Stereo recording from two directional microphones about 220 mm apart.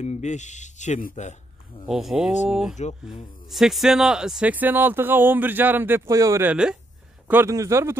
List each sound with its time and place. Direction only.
0.0 s speech: 30° left (ahead or behind)
1.9 s speech: centre (ahead or behind)